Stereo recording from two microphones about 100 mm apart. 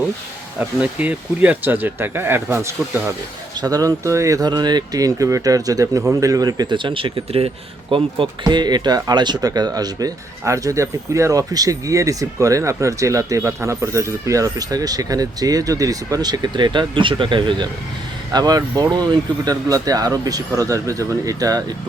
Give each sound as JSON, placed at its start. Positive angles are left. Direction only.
{"t": 0.6, "sound": "speech", "side_deg": -15}
{"t": 3.6, "sound": "speech", "side_deg": -40}
{"t": 8.4, "sound": "speech", "side_deg": -45}
{"t": 18.3, "sound": "speech", "side_deg": -40}